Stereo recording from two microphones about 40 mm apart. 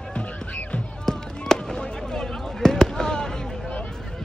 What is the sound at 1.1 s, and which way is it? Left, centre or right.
Fireworks, centre.